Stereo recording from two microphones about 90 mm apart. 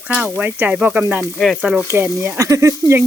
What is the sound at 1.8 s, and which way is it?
Speech, 30° right (ahead or behind).